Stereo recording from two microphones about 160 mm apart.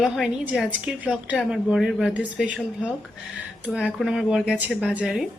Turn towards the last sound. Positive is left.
turn(degrees=-5)  # may be behind; listen again after turning